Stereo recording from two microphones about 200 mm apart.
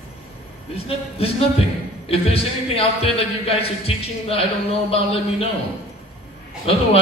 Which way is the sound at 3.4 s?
30° left (ahead or behind).